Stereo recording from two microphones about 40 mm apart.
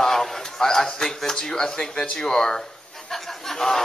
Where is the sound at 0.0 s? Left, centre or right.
Centre.